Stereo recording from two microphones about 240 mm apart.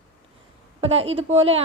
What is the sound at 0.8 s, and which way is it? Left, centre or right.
Speech, right.